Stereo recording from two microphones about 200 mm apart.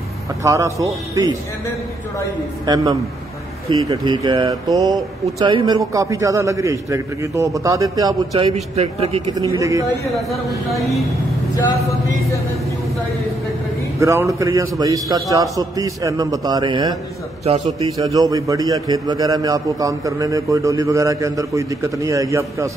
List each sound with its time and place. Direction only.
0.4 s a man's voice: 15° right (ahead or behind)
2.6 s a man's voice: 20° right (ahead or behind)
8.5 s a man's voice: 30° right (ahead or behind)
9.5 s a man's voice: 15° right (ahead or behind)
10.7 s speech: centre (ahead or behind)
13.9 s a man's voice: 15° right (ahead or behind)
17.9 s a man's voice: 15° right (ahead or behind)